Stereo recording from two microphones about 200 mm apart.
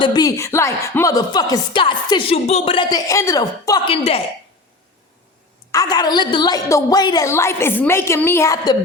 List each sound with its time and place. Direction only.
0.0 s speech: 20° left (ahead or behind)
5.7 s a woman's voice: 20° left (ahead or behind)